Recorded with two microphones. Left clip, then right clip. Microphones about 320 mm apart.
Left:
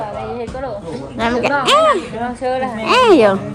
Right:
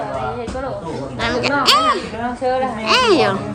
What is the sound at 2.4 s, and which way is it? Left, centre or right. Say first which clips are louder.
Speech: right 1 dB; left.